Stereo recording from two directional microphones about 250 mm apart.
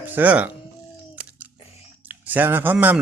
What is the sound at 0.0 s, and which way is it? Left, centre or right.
Speech, centre.